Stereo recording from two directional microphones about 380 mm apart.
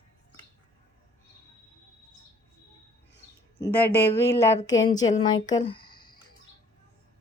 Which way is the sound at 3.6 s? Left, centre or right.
Centre.